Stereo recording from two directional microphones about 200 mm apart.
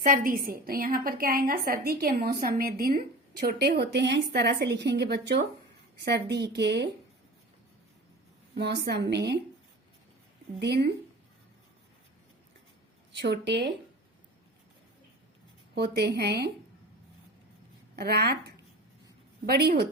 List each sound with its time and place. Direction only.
0.0 s a woman's voice: 45° right (ahead or behind)
8.5 s a woman's voice: 60° right (ahead or behind)
10.6 s a woman's voice: 55° right (ahead or behind)
13.1 s a woman's voice: 60° right (ahead or behind)
15.7 s a woman's voice: 55° right (ahead or behind)
17.9 s a woman's voice: 55° right (ahead or behind)